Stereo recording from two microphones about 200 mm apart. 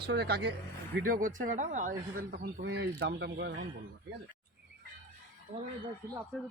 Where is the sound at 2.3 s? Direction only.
60° right (ahead or behind).